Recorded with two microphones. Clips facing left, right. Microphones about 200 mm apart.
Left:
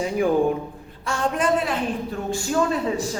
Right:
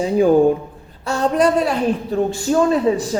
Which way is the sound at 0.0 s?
30° right (ahead or behind).